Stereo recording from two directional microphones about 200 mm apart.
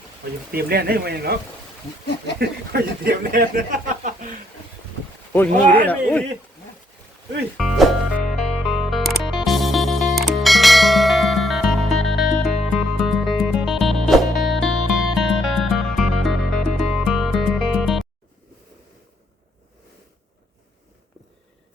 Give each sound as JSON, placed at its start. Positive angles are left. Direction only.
{"t": 0.5, "sound": "speech", "side_deg": -50}
{"t": 2.4, "sound": "speech", "side_deg": -50}
{"t": 5.3, "sound": "speech", "side_deg": 10}
{"t": 7.5, "sound": "music", "side_deg": -5}